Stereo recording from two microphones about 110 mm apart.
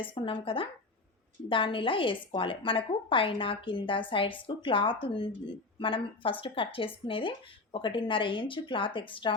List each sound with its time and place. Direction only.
0.0 s speech: 50° left (ahead or behind)